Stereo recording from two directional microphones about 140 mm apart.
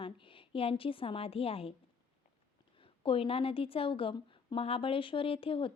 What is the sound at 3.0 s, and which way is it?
Speech, 40° left (ahead or behind).